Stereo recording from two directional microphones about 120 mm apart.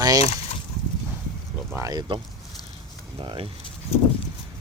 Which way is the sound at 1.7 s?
30° right (ahead or behind).